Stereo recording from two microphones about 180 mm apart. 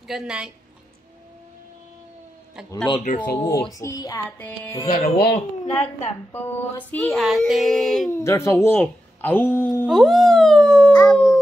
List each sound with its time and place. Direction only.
0.1 s child singing: 5° right (ahead or behind)
3.0 s speech: 45° left (ahead or behind)
3.7 s music: 20° left (ahead or behind)
4.8 s speech: 55° left (ahead or behind)
5.8 s a woman's voice: 35° left (ahead or behind)
6.3 s child singing: 10° left (ahead or behind)
8.1 s music: 15° left (ahead or behind)
8.6 s speech: 10° left (ahead or behind)
11.0 s howl: 10° left (ahead or behind)